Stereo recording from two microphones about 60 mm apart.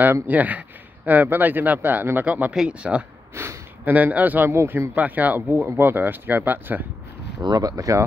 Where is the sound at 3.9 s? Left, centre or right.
Right.